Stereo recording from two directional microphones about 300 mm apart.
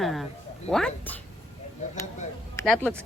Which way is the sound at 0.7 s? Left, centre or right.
Centre.